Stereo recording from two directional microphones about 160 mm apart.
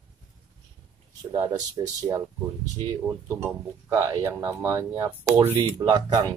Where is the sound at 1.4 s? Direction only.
25° right (ahead or behind).